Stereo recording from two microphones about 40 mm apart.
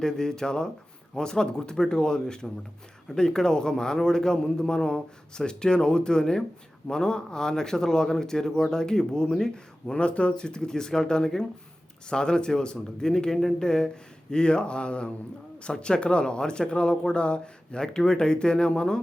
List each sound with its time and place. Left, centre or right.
0.0 s a man's voice: centre
9.9 s speech: left